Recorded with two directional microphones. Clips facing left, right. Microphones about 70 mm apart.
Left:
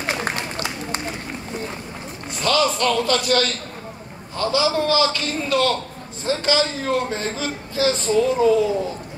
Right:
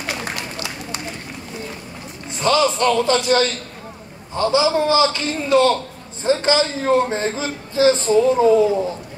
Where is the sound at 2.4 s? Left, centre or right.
Right.